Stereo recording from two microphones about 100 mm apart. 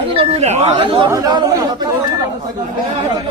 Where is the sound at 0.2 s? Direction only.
80° right.